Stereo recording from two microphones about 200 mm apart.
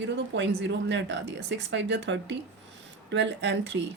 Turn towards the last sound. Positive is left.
turn(degrees=-65)  # may be behind; listen again after turning